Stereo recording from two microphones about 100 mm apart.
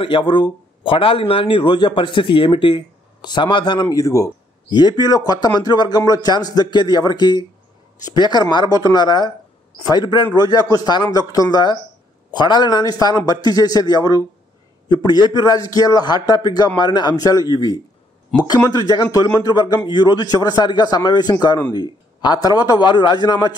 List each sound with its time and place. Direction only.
0.0 s a man's voice: 55° left (ahead or behind)
3.9 s a man's voice: 35° left (ahead or behind)
4.6 s a man's voice: 45° left (ahead or behind)